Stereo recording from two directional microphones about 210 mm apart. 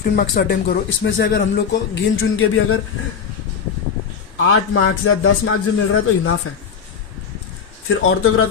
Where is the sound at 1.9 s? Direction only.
75° left (ahead or behind).